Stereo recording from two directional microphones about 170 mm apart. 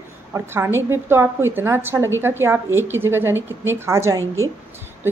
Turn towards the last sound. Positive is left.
turn(degrees=-15)  # may be behind; listen again after turning